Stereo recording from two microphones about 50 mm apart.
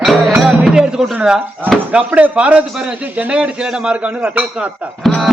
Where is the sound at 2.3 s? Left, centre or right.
Right.